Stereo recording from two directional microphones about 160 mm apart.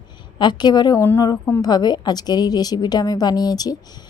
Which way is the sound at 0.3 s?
25° left (ahead or behind).